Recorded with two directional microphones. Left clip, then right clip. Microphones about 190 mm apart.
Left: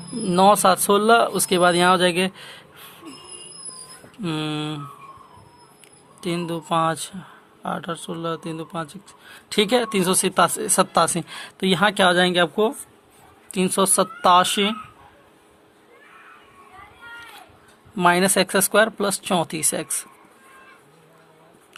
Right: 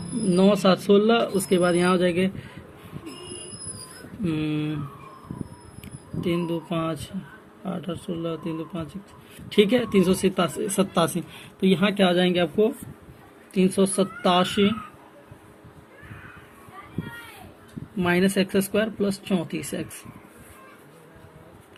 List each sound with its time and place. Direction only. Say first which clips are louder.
0.3 s speech: left 5 dB; 55° left (ahead or behind)
4.2 s mantra: left 1 dB; 50° left (ahead or behind)
6.2 s speech: left 1 dB; 55° left (ahead or behind)
17.9 s speech: left 6 dB; 55° left (ahead or behind)